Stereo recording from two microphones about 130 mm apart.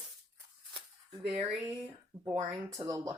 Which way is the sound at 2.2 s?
20° right (ahead or behind).